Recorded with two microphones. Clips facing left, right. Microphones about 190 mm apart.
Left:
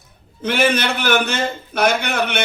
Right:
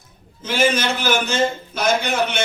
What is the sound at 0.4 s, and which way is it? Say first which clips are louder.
A man's voice: left 1 dB; 60° left (ahead or behind).